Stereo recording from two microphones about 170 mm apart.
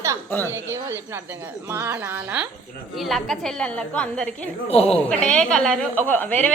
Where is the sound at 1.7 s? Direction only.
15° right (ahead or behind).